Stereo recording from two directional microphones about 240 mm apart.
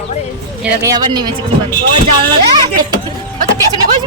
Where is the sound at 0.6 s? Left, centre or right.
Centre.